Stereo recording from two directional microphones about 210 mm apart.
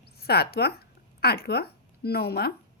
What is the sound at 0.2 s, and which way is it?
A woman's voice, 50° left (ahead or behind).